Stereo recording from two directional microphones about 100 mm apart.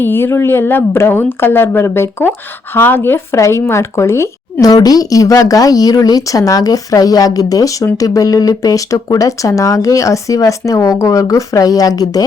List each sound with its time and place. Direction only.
0.0 s speech: 20° left (ahead or behind)
4.6 s speech: 40° left (ahead or behind)